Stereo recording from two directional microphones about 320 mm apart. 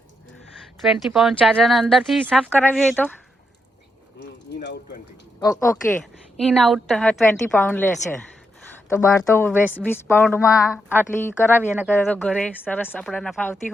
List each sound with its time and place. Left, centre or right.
0.8 s speech: centre
4.2 s water: left
5.4 s a woman's voice: centre